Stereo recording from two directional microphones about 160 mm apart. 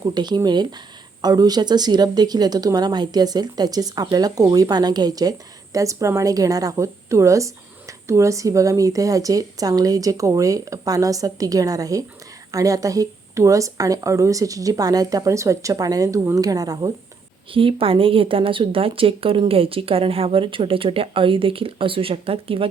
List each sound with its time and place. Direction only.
0.0 s speech: 25° right (ahead or behind)
17.5 s speech: 35° right (ahead or behind)